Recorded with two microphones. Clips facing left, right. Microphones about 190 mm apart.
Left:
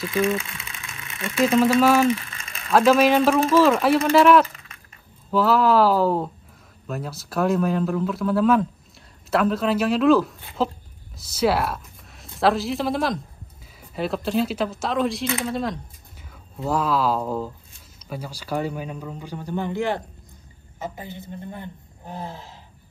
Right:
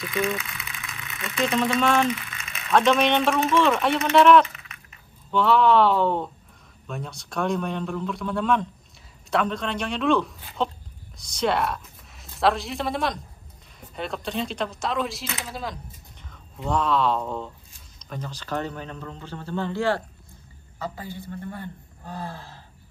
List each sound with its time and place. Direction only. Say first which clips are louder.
0.0 s sewing machine: left 4 dB; 30° left (ahead or behind)
1.8 s speech: left 2 dB; 5° left (ahead or behind)
2.0 s a sound: left 5 dB; 30° left (ahead or behind)
2.7 s speech: left 4 dB; 5° left (ahead or behind)
3.3 s speech: left 4 dB; 30° left (ahead or behind)
3.8 s a woman's voice: left 2 dB; 5° left (ahead or behind); by 22.6 s 20° left (ahead or behind)